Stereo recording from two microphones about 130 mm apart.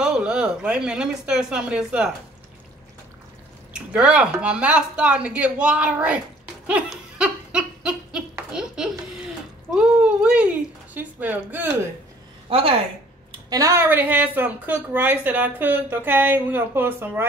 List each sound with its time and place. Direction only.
0.0 s speech: 5° right (ahead or behind)
3.7 s a woman's voice: 10° right (ahead or behind)
6.7 s a sound: 10° right (ahead or behind)
12.4 s a woman's voice: 45° right (ahead or behind)
13.5 s a woman's voice: 25° right (ahead or behind)